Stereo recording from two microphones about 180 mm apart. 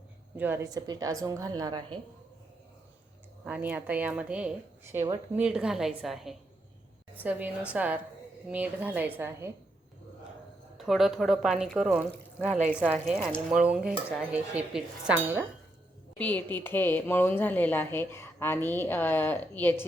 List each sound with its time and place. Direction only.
0.3 s a woman's voice: 10° right (ahead or behind)
3.4 s a woman's voice: 10° right (ahead or behind)
5.4 s a woman's voice: 5° right (ahead or behind)
10.8 s a woman's voice: centre (ahead or behind)
16.1 s a woman's voice: 10° left (ahead or behind)